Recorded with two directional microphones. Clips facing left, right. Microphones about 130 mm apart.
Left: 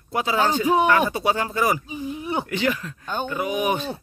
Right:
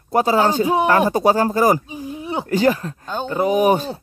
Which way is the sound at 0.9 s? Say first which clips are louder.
Right 5 dB; 40° right (ahead or behind).